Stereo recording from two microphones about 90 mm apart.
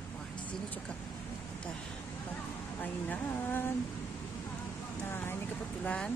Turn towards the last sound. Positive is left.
turn(degrees=15)  # may be behind; listen again after turning